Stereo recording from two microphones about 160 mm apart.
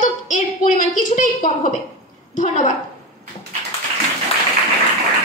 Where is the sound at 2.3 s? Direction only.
50° left (ahead or behind).